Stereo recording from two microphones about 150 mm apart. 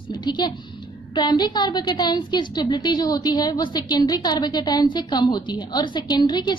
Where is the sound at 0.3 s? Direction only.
30° left (ahead or behind).